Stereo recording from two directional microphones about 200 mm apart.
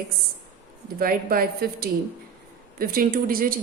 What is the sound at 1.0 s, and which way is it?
A woman's voice, 45° right (ahead or behind).